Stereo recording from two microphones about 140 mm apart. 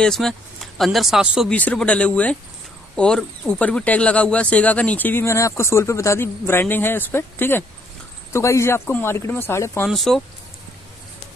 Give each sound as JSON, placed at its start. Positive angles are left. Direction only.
{"t": 0.0, "sound": "speech", "side_deg": 0}
{"t": 1.5, "sound": "speech", "side_deg": 10}
{"t": 9.8, "sound": "speech", "side_deg": 0}